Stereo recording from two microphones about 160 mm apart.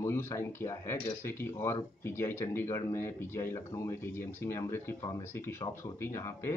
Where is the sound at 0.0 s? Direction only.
15° left (ahead or behind).